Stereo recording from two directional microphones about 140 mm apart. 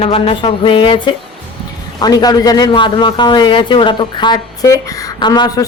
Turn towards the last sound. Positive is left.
turn(degrees=25)  # may be behind; listen again after turning